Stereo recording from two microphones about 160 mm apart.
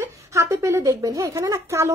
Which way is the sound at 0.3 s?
15° right (ahead or behind).